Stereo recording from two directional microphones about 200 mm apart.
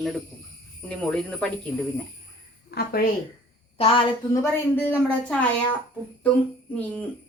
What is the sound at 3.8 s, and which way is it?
Speech, 25° left (ahead or behind).